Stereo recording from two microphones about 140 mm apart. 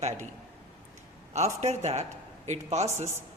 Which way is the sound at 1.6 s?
50° right (ahead or behind).